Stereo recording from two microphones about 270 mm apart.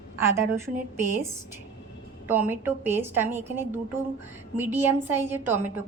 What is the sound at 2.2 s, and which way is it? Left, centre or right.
A woman's voice, centre.